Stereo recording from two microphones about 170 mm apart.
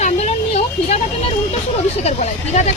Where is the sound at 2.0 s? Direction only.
40° left (ahead or behind).